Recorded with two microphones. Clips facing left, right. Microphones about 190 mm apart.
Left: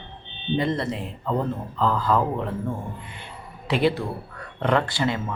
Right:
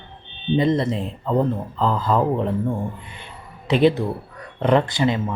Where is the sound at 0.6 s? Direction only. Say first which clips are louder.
Right 6 dB; 20° right (ahead or behind).